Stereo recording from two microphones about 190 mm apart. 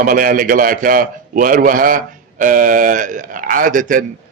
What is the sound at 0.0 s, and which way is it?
Speech, 45° right (ahead or behind).